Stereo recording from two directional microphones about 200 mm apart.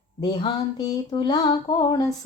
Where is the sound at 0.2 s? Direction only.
20° left (ahead or behind).